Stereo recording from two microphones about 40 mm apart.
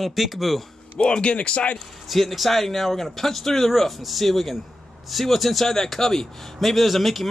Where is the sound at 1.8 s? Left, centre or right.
Centre.